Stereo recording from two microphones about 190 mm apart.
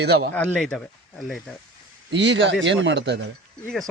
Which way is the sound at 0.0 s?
60° right (ahead or behind).